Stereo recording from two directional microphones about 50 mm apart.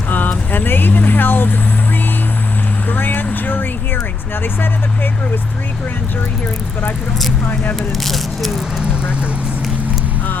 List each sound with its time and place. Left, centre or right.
0.1 s vehicle: left
2.9 s vehicle: left
7.4 s speech: left
7.8 s speech: centre